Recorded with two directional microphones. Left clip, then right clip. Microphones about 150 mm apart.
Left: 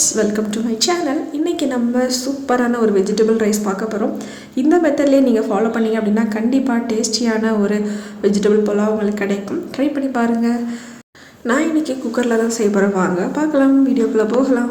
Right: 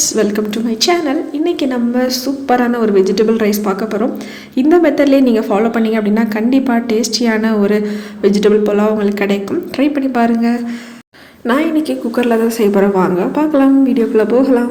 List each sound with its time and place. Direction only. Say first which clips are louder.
0.0 s a woman's voice: right 3 dB; 10° right (ahead or behind)